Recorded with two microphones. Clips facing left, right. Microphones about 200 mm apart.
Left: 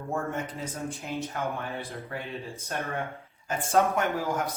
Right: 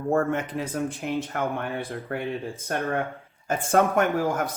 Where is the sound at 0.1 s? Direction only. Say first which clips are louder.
Right 8 dB; 70° right (ahead or behind).